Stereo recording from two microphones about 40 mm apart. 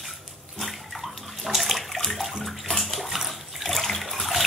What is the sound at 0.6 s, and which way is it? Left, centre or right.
Bathtub, centre.